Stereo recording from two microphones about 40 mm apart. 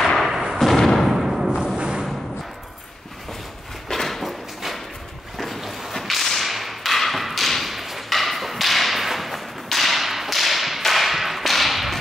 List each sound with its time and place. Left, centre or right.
0.3 s thump: centre
0.7 s thump: centre
1.1 s thump: centre
1.8 s music: right
3.9 s a sound: centre
5.4 s whip: centre